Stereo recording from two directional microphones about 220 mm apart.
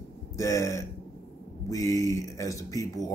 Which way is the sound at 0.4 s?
15° left (ahead or behind).